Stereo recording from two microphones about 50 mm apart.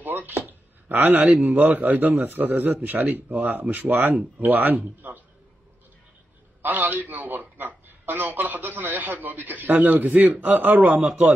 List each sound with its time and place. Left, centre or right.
0.0 s speech: right
6.6 s speech: right
10.1 s speech: centre
10.4 s speech: right